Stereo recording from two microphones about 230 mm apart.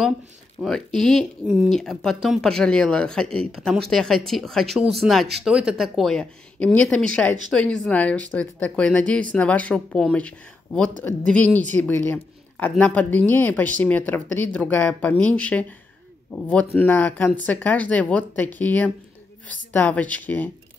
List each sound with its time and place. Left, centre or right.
0.6 s speech: centre
16.7 s speech: centre